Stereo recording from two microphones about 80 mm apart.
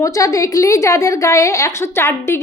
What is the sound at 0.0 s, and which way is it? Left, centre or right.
A woman's voice, left.